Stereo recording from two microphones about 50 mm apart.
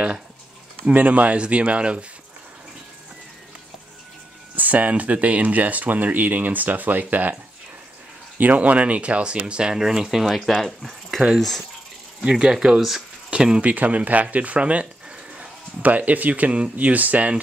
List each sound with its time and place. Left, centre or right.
0.8 s speech: right
4.6 s speech: right
8.4 s speech: right; by 10.3 s centre
10.3 s speech: centre
12.2 s speech: centre
13.6 s speech: right
15.8 s speech: right